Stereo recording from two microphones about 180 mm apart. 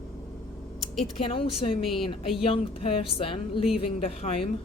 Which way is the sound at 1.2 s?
30° left (ahead or behind).